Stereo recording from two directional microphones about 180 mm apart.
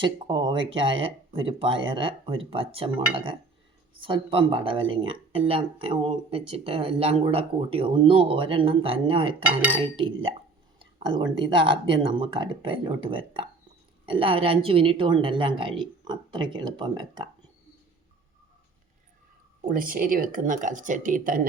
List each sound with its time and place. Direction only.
0.0 s speech: 25° right (ahead or behind)
19.6 s speech: 50° right (ahead or behind)